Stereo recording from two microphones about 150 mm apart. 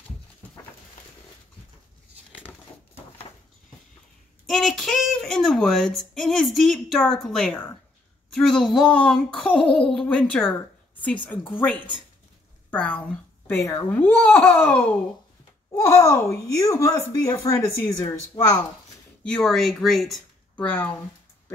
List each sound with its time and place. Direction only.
4.5 s a child's voice: centre (ahead or behind); by 18.7 s 25° left (ahead or behind)
19.2 s speech: 5° left (ahead or behind)